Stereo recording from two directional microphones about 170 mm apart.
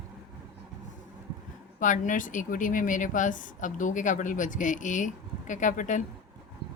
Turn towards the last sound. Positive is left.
turn(degrees=45)  # may be behind; listen again after turning